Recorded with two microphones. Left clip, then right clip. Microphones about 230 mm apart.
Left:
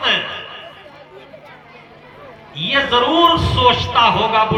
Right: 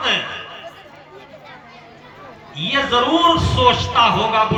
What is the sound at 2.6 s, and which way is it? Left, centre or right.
A man's voice, centre.